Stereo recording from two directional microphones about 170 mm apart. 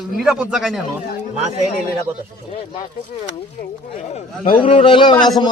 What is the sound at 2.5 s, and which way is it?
Speech, 40° left (ahead or behind).